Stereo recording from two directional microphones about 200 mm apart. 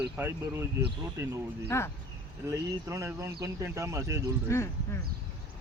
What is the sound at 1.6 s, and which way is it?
Speech, 15° left (ahead or behind).